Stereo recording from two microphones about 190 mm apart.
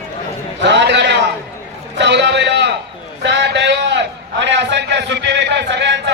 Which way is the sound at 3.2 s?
65° right (ahead or behind).